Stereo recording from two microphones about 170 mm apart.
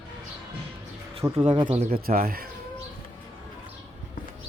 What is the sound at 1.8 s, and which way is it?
Speech, 60° right (ahead or behind).